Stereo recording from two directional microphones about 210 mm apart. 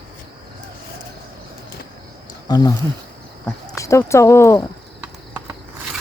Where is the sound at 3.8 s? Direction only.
15° left (ahead or behind).